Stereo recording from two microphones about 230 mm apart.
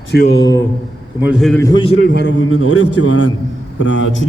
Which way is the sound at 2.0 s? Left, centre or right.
Left.